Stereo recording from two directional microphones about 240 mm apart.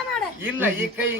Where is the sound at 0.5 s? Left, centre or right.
Centre.